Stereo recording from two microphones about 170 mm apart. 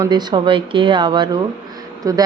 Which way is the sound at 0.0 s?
25° right (ahead or behind).